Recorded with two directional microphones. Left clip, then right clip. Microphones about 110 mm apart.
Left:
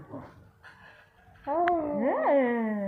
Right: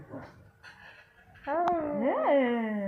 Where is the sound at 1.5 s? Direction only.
10° left (ahead or behind).